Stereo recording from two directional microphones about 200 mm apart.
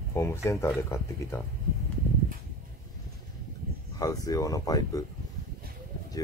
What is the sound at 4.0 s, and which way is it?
Speech, 15° left (ahead or behind).